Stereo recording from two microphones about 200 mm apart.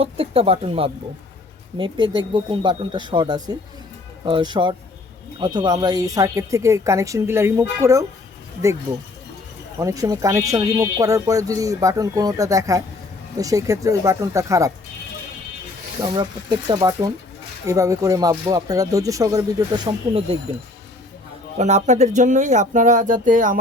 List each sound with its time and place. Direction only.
0.0 s speech: 30° right (ahead or behind)
16.0 s speech: 20° right (ahead or behind)
21.6 s speech: 35° right (ahead or behind)